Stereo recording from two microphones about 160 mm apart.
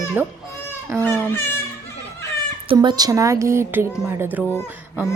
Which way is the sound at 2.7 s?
25° right (ahead or behind).